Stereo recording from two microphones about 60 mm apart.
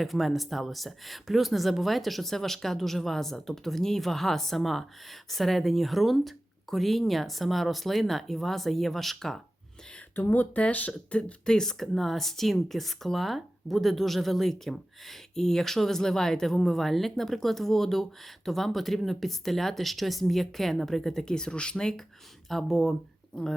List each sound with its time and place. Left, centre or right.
0.0 s speech: centre
10.2 s speech: left
10.5 s speech: left
22.4 s speech: centre
23.3 s speech: centre